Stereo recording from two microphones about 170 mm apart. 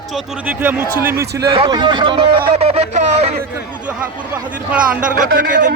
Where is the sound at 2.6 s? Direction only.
35° right (ahead or behind).